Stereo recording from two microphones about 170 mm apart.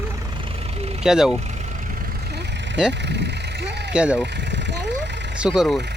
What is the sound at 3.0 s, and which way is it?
Vehicle, 85° right.